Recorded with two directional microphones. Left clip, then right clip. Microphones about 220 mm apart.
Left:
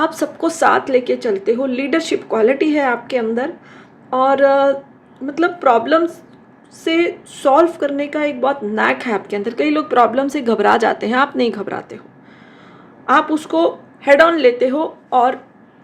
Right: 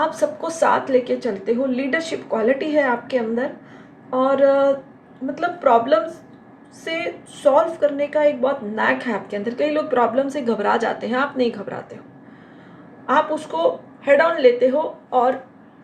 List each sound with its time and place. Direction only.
0.0 s a woman's voice: 55° left (ahead or behind)
13.1 s a woman's voice: 50° left (ahead or behind)